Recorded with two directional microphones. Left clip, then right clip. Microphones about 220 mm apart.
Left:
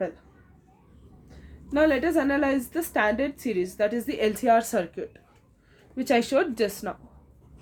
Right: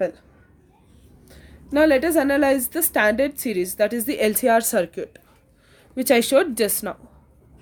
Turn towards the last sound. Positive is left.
turn(degrees=-50)  # may be behind; listen again after turning